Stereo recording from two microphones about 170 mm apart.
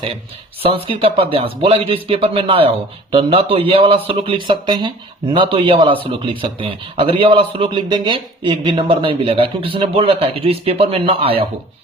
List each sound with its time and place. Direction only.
0.6 s speech: 35° right (ahead or behind)